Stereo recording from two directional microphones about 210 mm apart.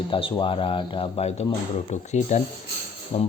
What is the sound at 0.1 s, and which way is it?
Speech, 25° left (ahead or behind).